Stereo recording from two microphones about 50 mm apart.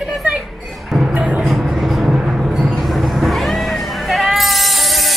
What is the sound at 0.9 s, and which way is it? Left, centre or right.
Music, centre.